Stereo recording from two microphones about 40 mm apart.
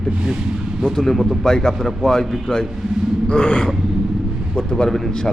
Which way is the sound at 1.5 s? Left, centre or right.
Centre.